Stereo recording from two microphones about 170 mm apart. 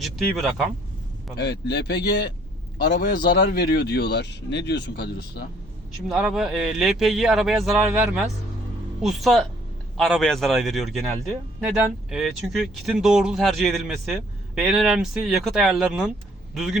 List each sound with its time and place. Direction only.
0.0 s speech: centre (ahead or behind)
1.4 s speech: 75° left (ahead or behind)
6.1 s speech: centre (ahead or behind)
12.1 s speech: centre (ahead or behind)